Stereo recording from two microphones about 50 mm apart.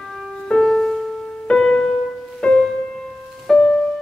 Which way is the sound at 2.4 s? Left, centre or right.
Left.